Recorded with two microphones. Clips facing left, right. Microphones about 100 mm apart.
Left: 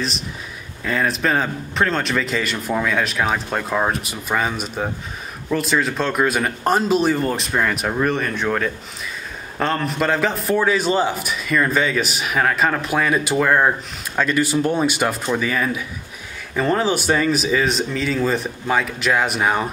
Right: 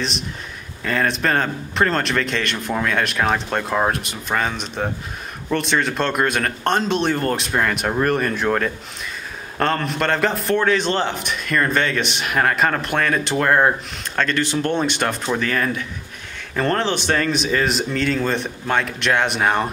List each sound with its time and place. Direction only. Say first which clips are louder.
0.8 s a man's voice: even; centre (ahead or behind)